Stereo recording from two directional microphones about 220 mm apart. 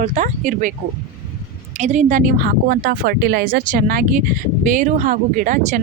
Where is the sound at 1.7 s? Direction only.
30° right (ahead or behind).